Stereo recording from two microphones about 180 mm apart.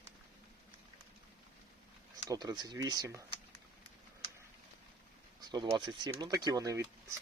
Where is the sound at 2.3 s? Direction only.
20° right (ahead or behind).